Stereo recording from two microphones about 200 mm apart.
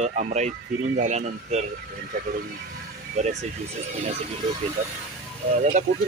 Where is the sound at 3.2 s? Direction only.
35° right (ahead or behind).